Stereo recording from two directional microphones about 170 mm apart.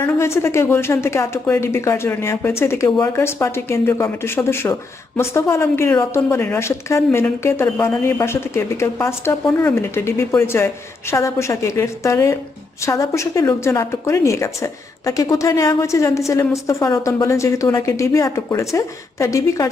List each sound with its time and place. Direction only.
0.0 s a woman's voice: 15° left (ahead or behind)